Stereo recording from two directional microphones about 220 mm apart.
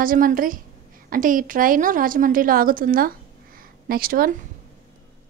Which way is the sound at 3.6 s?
40° right (ahead or behind).